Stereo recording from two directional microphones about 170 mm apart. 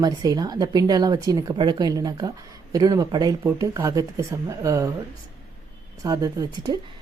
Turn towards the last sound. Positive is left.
turn(degrees=-20)  # may be behind; listen again after turning